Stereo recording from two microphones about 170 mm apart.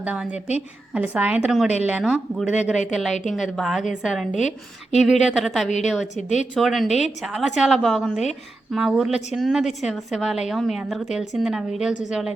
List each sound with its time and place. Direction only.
0.0 s speech: 5° right (ahead or behind)
0.3 s a woman's voice: 40° left (ahead or behind)
0.9 s a woman's voice: 10° right (ahead or behind)